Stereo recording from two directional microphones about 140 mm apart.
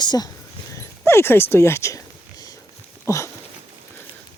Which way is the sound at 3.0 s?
20° left (ahead or behind).